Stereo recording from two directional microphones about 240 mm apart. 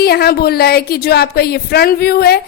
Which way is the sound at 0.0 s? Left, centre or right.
Left.